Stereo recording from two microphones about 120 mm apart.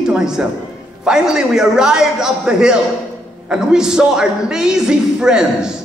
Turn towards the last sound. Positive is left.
turn(degrees=-5)  # may be behind; listen again after turning